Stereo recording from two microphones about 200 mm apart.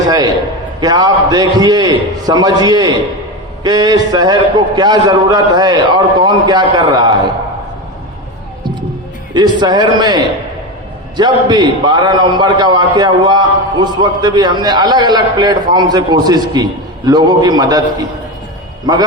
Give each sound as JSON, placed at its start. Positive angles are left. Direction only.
{"t": 0.8, "sound": "a man's voice", "side_deg": -20}
{"t": 9.3, "sound": "a man's voice", "side_deg": -20}